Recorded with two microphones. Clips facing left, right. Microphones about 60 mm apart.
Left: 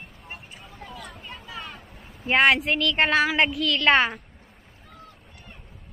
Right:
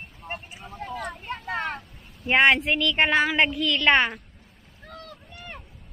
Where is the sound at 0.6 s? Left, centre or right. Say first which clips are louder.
Right 8 dB; right.